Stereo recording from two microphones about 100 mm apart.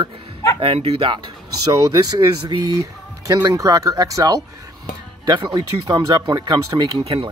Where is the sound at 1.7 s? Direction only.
40° right (ahead or behind).